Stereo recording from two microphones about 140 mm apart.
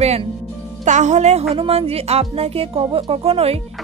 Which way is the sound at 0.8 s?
60° right (ahead or behind).